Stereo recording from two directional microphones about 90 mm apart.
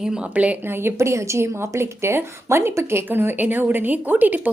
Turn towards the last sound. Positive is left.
turn(degrees=-20)  # may be behind; listen again after turning